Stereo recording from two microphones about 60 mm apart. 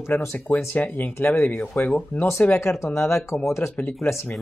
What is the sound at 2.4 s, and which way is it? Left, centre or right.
Speech, left.